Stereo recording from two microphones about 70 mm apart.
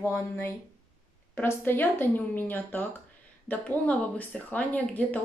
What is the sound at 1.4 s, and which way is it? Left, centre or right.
A woman's voice, left.